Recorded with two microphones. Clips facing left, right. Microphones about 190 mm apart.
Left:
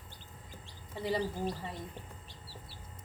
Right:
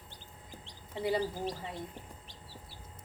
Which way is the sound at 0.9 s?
20° right (ahead or behind).